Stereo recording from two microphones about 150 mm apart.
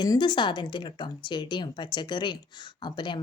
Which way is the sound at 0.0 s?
30° left (ahead or behind).